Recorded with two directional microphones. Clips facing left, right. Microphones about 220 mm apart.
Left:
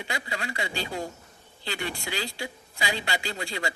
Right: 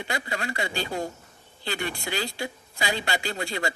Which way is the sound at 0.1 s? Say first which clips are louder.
Right 3 dB; 50° right (ahead or behind).